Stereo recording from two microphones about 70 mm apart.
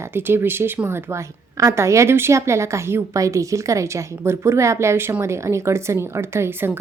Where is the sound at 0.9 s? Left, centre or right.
Right.